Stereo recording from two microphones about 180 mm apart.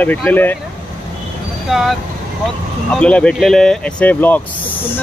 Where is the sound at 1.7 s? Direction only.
Centre (ahead or behind).